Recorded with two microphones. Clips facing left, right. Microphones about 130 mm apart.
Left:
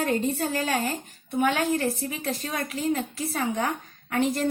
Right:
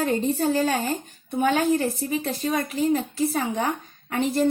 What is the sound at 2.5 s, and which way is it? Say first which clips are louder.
A woman's voice: right 5 dB; 30° right (ahead or behind).